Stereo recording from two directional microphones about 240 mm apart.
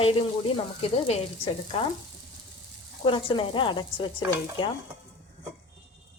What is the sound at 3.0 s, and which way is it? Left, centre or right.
A woman's voice, left.